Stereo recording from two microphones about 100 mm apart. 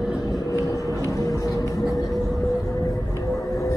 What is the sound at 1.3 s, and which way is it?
Vehicle, 35° left (ahead or behind).